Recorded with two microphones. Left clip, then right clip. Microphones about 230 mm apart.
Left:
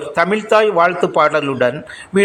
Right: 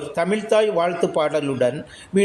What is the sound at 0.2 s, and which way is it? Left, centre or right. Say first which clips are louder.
A man's voice: left 6 dB; centre.